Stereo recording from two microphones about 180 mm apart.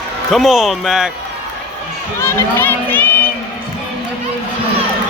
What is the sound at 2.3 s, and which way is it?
Crowd, 15° left (ahead or behind).